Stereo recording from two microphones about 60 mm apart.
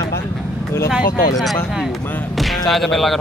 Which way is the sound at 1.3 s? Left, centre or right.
Centre.